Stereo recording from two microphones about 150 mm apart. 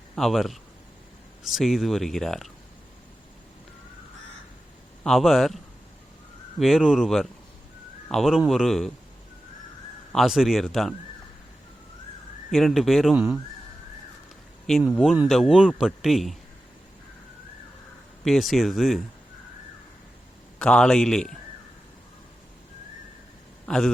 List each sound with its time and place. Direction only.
0.2 s speech: centre (ahead or behind)
5.0 s speech: centre (ahead or behind)
6.6 s speech: centre (ahead or behind)
10.1 s speech: centre (ahead or behind)
12.5 s speech: centre (ahead or behind)
14.7 s speech: centre (ahead or behind)
18.3 s speech: centre (ahead or behind)
20.6 s speech: 5° left (ahead or behind)
23.6 s a man's voice: 5° left (ahead or behind)